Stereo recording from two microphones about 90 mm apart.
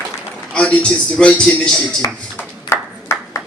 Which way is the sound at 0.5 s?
10° left (ahead or behind).